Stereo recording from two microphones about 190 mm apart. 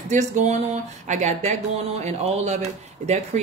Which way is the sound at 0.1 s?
40° right (ahead or behind).